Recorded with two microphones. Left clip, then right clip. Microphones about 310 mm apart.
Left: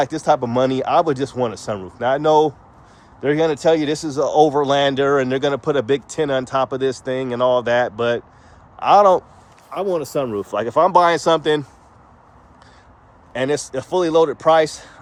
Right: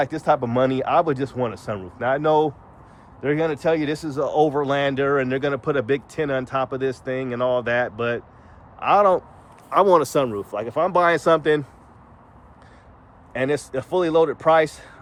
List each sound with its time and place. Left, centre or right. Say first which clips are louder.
0.0 s speech: left 3 dB; centre
9.8 s speech: right 3 dB; centre
10.3 s speech: left 5 dB; left
10.8 s speech: left 5 dB; centre
13.3 s speech: left 2 dB; centre